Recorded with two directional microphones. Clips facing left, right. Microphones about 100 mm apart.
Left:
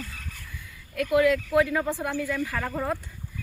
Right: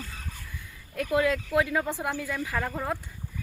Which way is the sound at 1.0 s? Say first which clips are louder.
Left 4 dB; 25° right (ahead or behind).